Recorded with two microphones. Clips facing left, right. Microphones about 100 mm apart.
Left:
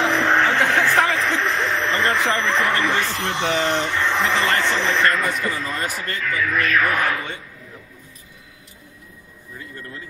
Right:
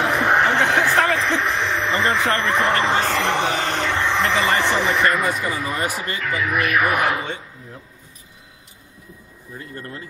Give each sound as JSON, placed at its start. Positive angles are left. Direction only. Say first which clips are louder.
{"t": 0.0, "sound": "a sound", "louder": "even", "side_deg": -10}
{"t": 1.0, "sound": "a sound", "louder": "right 1 dB", "side_deg": 0}
{"t": 2.6, "sound": "speech", "louder": "right 2 dB", "side_deg": -25}
{"t": 3.1, "sound": "speech", "louder": "right 5 dB", "side_deg": -65}
{"t": 3.4, "sound": "speech", "louder": "left 2 dB", "side_deg": -45}
{"t": 4.1, "sound": "speech", "louder": "right 1 dB", "side_deg": 0}
{"t": 4.6, "sound": "speech", "louder": "right 1 dB", "side_deg": -15}
{"t": 9.8, "sound": "speech", "louder": "right 3 dB", "side_deg": -40}